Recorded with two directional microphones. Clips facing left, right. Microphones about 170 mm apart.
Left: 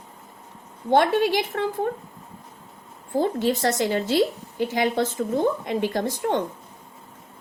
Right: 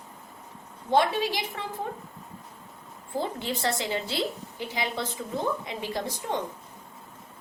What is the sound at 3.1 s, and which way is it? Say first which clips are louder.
A woman's voice: left 8 dB; 45° left (ahead or behind).